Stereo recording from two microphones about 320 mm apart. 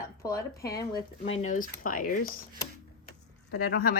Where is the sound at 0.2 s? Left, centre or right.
Centre; by 2.1 s left.